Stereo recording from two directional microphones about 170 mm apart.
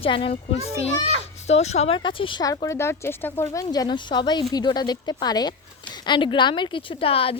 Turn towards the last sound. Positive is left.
turn(degrees=35)  # may be behind; listen again after turning